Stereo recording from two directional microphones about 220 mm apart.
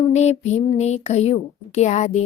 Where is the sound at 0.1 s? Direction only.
30° left (ahead or behind).